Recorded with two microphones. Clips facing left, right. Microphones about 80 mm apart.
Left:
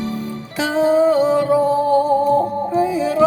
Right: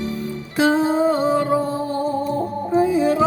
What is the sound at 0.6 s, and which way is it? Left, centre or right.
Music, right.